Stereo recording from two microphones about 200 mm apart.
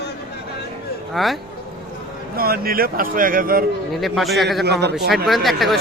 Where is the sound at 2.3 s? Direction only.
50° right (ahead or behind).